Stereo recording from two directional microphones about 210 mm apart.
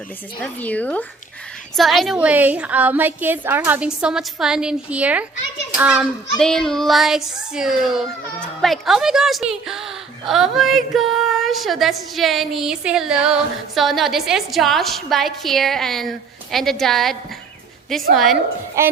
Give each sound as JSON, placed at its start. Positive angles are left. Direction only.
{"t": 0.3, "sound": "a woman's voice", "side_deg": 5}
{"t": 18.8, "sound": "a woman's voice", "side_deg": -15}